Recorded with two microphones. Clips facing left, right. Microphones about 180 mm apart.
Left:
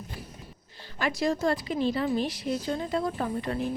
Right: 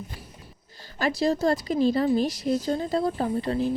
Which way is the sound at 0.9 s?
35° right (ahead or behind).